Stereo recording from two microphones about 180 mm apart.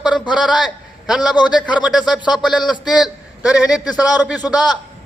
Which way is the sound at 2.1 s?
25° left (ahead or behind).